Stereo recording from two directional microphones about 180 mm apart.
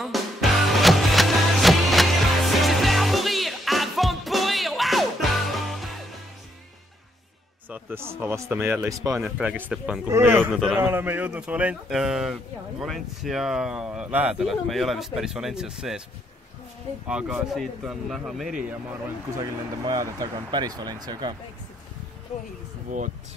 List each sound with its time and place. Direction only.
0.0 s music: centre (ahead or behind)
7.7 s speech: 15° right (ahead or behind)
10.5 s speech: centre (ahead or behind)
10.8 s speech: 10° right (ahead or behind)
17.1 s speech: 5° right (ahead or behind)
18.7 s speech: 15° right (ahead or behind)
22.8 s speech: 45° right (ahead or behind)